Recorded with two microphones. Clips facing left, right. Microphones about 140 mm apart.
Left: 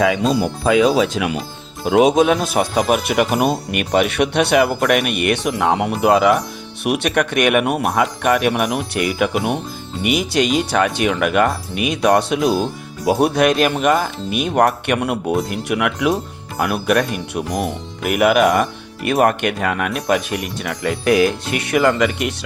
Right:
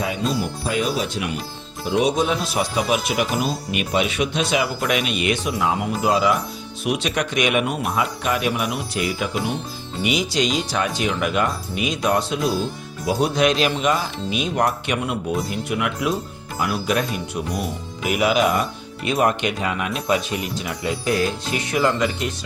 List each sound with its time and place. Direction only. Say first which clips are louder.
0.8 s speech: left 8 dB; 90° left
1.8 s speech: left 7 dB; 80° left; by 20.9 s 60° left (ahead or behind)
21.0 s speech: left 8 dB; 70° left (ahead or behind)